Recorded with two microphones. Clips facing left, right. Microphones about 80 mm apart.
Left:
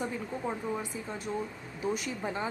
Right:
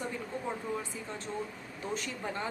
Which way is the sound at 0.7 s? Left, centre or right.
Centre.